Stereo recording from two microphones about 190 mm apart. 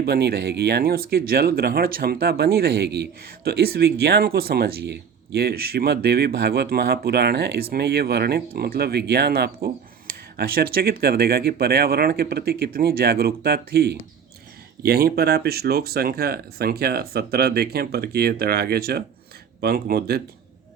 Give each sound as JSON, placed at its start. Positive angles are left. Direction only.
{"t": 0.0, "sound": "speech", "side_deg": -55}